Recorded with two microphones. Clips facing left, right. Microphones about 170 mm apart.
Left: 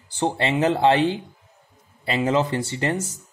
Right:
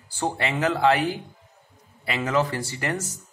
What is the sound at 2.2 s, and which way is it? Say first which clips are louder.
Speech: left 2 dB; 25° left (ahead or behind).